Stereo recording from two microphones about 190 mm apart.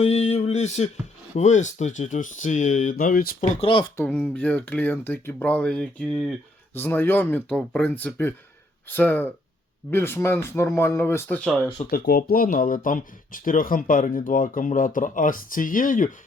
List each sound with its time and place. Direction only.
0.0 s speech: 35° left (ahead or behind)
3.6 s speech: 25° left (ahead or behind)
3.9 s speech: 10° left (ahead or behind)
6.7 s speech: 10° left (ahead or behind)
11.9 s speech: 50° left (ahead or behind)